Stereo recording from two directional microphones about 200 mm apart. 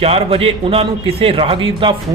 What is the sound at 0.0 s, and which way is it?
A man's voice, 30° right (ahead or behind).